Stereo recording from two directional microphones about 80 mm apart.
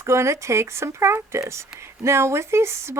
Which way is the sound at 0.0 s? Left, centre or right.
Right.